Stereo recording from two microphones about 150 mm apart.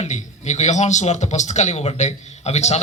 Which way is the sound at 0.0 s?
50° left (ahead or behind).